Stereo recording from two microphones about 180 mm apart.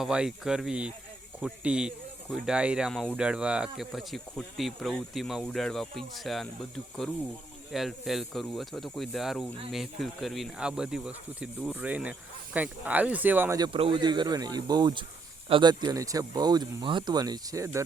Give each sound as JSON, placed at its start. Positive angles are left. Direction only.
{"t": 0.0, "sound": "speech", "side_deg": -5}
{"t": 13.6, "sound": "speech", "side_deg": -30}